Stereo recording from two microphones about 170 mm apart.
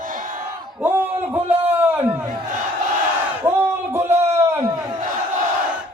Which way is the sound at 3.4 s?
15° right (ahead or behind).